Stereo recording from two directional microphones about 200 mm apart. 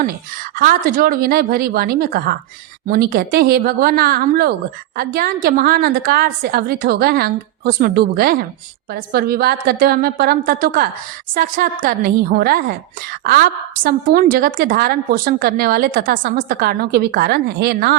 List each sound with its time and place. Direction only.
0.5 s a woman's voice: 45° right (ahead or behind)